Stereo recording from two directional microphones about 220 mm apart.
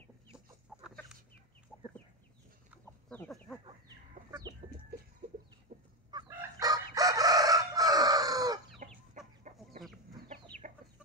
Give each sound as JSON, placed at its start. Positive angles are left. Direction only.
{"t": 0.7, "sound": "chicken", "side_deg": 0}
{"t": 2.8, "sound": "chicken", "side_deg": 5}
{"t": 5.7, "sound": "chicken", "side_deg": -40}
{"t": 6.1, "sound": "chicken", "side_deg": -15}
{"t": 8.7, "sound": "chicken", "side_deg": -35}